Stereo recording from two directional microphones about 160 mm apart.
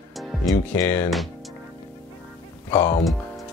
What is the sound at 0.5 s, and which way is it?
Speech, 10° left (ahead or behind).